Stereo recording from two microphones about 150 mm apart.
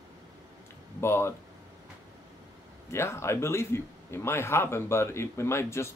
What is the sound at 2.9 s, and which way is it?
A man's voice, 15° left (ahead or behind).